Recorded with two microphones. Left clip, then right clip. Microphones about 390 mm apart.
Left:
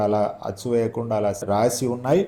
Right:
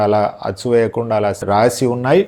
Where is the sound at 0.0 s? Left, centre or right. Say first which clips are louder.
Right 7 dB; right.